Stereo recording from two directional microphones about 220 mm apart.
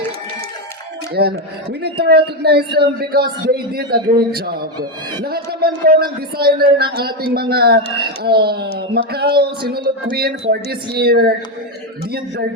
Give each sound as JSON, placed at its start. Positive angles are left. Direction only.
{"t": 1.1, "sound": "speech", "side_deg": -45}